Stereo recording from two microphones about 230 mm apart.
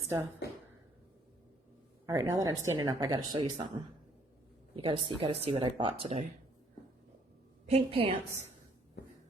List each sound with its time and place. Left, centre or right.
2.0 s speech: centre
7.7 s speech: right